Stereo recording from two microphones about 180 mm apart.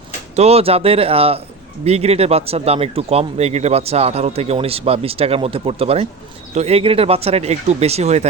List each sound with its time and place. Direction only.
0.3 s speech: 35° right (ahead or behind)